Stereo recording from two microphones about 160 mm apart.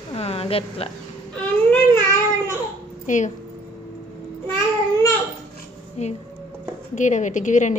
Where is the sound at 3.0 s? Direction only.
50° left (ahead or behind).